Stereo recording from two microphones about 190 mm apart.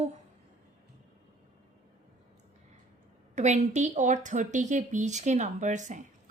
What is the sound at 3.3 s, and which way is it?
Speech, 35° right (ahead or behind).